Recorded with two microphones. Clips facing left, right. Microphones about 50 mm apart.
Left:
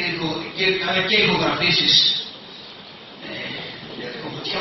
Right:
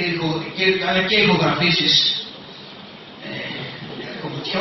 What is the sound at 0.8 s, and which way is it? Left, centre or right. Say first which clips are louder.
Speech: right 2 dB; right.